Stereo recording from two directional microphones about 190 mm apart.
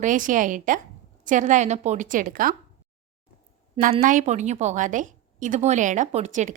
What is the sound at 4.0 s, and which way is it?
A woman's voice, 45° right (ahead or behind).